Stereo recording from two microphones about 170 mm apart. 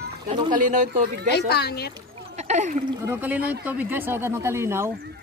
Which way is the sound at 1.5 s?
70° left (ahead or behind).